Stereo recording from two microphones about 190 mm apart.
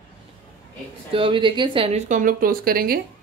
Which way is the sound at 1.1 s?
25° right (ahead or behind).